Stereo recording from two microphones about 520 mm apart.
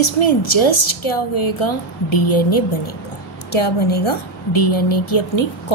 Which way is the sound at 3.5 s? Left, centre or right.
Left.